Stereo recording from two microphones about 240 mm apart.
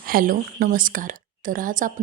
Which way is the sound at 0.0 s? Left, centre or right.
Right.